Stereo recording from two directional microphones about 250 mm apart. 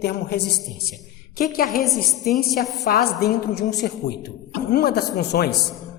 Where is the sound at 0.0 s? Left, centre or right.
Left.